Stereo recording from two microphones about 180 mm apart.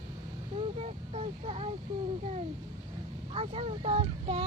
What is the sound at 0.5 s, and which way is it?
Speech, 35° right (ahead or behind).